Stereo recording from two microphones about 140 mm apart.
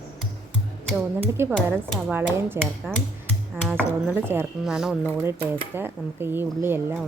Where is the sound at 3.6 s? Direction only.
15° right (ahead or behind).